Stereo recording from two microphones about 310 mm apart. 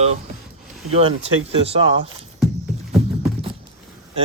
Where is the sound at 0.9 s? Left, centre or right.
Centre.